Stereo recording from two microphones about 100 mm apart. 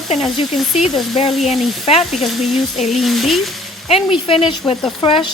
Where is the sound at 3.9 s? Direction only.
70° left (ahead or behind).